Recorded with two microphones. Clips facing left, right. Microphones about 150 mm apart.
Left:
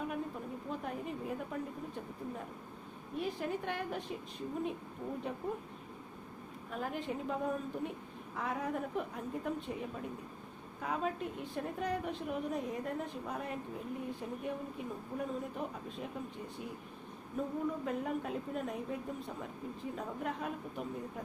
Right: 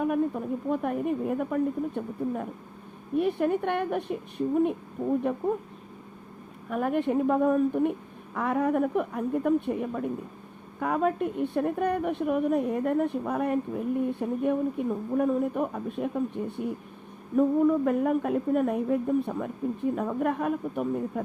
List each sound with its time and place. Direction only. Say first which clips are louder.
0.0 s a woman's voice: right 12 dB; 60° right (ahead or behind)
3.2 s a woman's voice: right 12 dB; 65° right (ahead or behind)
6.7 s a woman's voice: right 12 dB; 60° right (ahead or behind)